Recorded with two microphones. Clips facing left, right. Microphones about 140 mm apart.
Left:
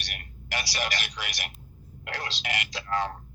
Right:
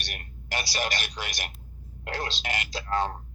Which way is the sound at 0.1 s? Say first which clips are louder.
Right 1 dB; 35° right (ahead or behind).